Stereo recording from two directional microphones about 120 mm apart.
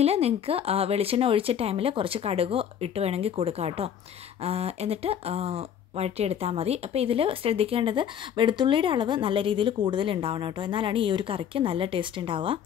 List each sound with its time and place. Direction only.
0.0 s speech: 60° right (ahead or behind)